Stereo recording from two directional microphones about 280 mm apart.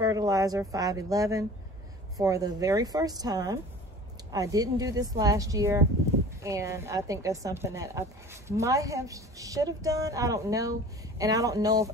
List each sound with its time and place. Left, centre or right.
0.0 s a woman's voice: centre